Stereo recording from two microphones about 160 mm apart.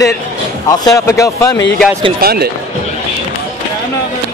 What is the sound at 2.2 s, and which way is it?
Speech, 75° right (ahead or behind).